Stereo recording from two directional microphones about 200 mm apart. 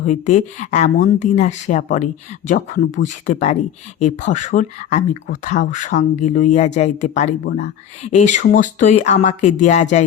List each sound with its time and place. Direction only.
0.0 s speech: 35° left (ahead or behind)